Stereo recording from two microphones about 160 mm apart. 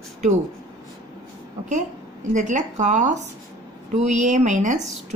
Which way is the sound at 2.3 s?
50° right (ahead or behind).